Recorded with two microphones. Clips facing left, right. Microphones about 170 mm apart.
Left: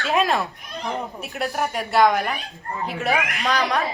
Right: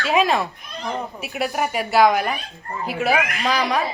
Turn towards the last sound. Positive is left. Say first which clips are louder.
# right 1 dB
turn(degrees=0)  # may be behind; listen again after turning